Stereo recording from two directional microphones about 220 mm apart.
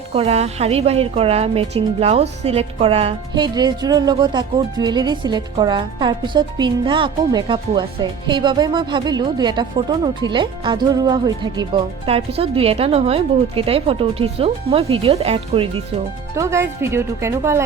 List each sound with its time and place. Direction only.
0.1 s a woman's voice: 30° right (ahead or behind)
16.3 s speech: 15° right (ahead or behind)